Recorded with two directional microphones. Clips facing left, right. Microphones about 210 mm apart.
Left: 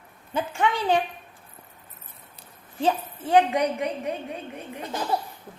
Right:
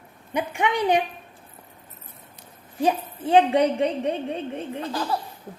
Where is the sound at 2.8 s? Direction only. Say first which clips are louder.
Right 2 dB; 20° right (ahead or behind).